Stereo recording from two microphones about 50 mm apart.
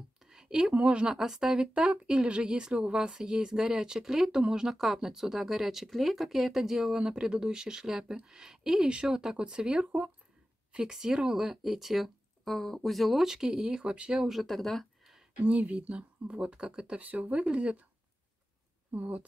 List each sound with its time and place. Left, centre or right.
0.2 s a woman's voice: centre
1.1 s speech: centre
1.7 s speech: right; by 13.2 s centre
13.2 s speech: centre
14.4 s speech: centre
15.4 s speech: right
17.0 s speech: right
18.9 s speech: right